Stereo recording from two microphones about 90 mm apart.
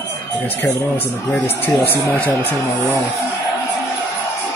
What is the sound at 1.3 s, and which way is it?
Speech, 20° left (ahead or behind).